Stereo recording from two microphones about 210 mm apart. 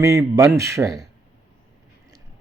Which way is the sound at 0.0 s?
15° right (ahead or behind).